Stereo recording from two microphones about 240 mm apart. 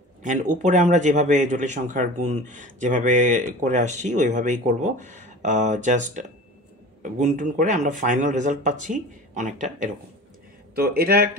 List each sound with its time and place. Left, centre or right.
0.2 s speech: right